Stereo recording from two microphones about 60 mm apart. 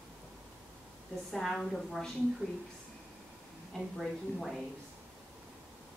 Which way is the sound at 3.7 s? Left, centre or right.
Centre.